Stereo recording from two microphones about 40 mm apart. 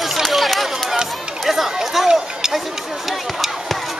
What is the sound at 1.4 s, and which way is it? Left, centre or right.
Chatter, centre.